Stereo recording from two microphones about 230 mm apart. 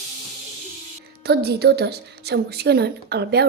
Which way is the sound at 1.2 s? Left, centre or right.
Right.